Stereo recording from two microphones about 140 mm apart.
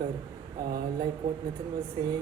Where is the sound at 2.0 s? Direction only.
30° right (ahead or behind).